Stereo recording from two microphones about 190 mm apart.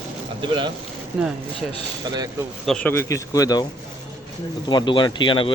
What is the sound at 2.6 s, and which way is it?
Speech, 5° left (ahead or behind).